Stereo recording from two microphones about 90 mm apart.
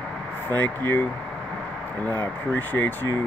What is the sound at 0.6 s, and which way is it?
Speech, 20° left (ahead or behind).